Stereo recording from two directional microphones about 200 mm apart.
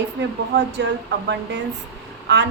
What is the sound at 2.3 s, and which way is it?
Speech, 60° right (ahead or behind).